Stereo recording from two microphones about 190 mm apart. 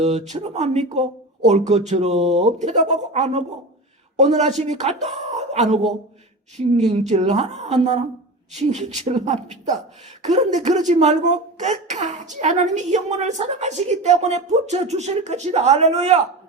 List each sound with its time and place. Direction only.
0.0 s speech: 35° right (ahead or behind)